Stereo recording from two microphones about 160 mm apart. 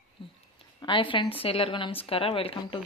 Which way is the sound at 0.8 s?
30° left (ahead or behind).